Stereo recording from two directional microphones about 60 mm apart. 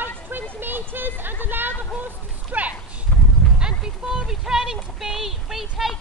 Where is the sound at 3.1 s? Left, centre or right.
Left.